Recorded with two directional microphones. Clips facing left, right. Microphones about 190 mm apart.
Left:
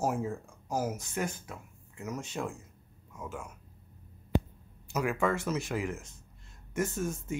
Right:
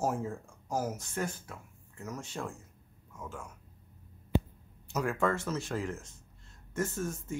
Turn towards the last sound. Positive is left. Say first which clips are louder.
# left 2 dB
turn(degrees=15)  # may be behind; listen again after turning